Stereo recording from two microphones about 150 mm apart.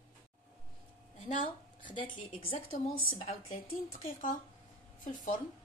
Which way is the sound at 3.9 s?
60° left (ahead or behind).